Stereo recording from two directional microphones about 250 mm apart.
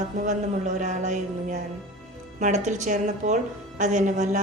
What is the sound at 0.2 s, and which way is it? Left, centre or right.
A woman's voice, right.